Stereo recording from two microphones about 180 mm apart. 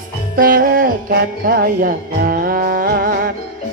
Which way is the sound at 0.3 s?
50° right (ahead or behind).